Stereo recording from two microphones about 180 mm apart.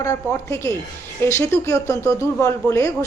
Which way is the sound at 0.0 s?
15° left (ahead or behind).